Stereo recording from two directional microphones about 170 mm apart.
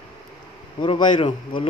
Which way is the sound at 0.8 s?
30° left (ahead or behind).